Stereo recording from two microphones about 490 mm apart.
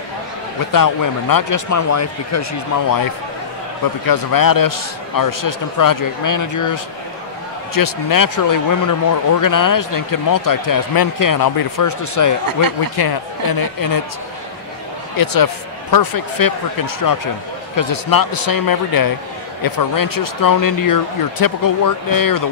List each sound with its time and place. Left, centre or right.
0.7 s a man's voice: left
3.8 s a man's voice: left
12.9 s speech: left
15.1 s a man's voice: left